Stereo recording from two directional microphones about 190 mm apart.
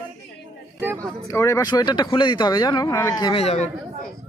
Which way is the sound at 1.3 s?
15° left (ahead or behind).